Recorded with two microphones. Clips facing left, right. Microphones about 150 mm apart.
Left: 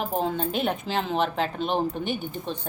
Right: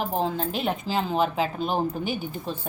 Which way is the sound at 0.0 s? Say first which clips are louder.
Even; centre (ahead or behind).